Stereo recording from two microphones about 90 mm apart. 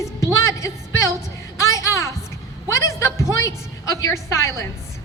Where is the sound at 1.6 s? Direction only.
35° left (ahead or behind).